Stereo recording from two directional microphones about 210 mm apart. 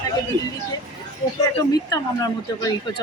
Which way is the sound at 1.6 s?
15° left (ahead or behind).